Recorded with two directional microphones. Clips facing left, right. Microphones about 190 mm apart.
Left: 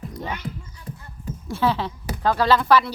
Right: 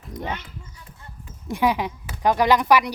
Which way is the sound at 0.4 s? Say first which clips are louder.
Left 9 dB; 35° left (ahead or behind).